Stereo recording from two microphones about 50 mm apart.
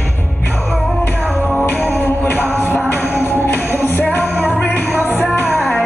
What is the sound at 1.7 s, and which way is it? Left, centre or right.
Music, left.